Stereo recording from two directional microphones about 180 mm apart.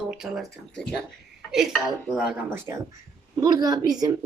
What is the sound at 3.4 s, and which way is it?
Speech, 20° right (ahead or behind).